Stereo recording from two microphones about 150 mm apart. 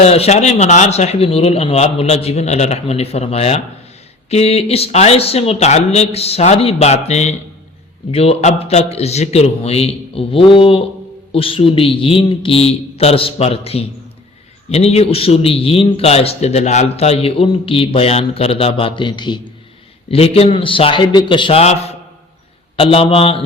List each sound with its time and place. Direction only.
0.0 s a man's voice: 45° left (ahead or behind)
20.1 s a man's voice: 40° left (ahead or behind)